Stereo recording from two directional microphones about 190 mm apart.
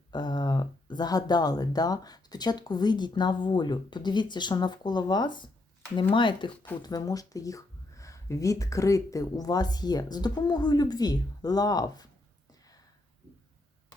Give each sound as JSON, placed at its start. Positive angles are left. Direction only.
{"t": 0.1, "sound": "speech", "side_deg": 20}